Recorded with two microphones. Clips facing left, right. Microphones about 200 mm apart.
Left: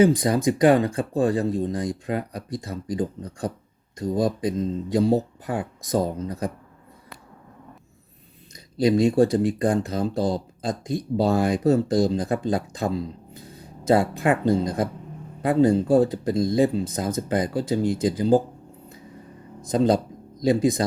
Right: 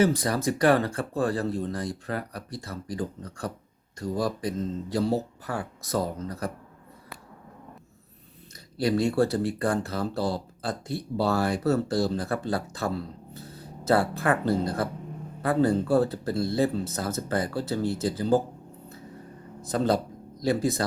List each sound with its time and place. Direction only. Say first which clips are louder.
0.0 s speech: left 5 dB; 20° left (ahead or behind)
8.8 s a man's voice: left 5 dB; 15° left (ahead or behind)
19.6 s speech: left 5 dB; 15° left (ahead or behind)